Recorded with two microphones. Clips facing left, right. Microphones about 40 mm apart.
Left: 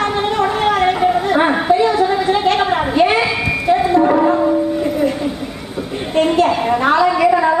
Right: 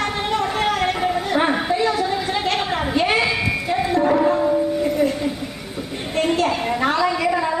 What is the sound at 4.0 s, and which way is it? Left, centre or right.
Music, centre.